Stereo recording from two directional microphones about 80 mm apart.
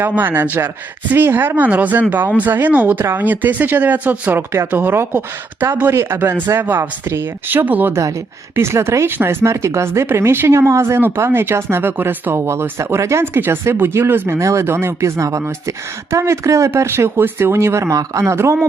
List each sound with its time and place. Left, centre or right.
0.2 s speech: right
8.5 s speech: right